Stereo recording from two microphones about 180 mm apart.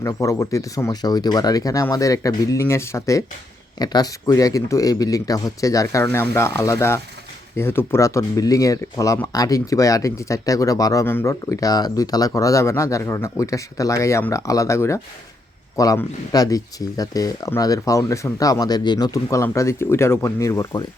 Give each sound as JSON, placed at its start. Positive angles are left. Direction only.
{"t": 0.0, "sound": "speech", "side_deg": 15}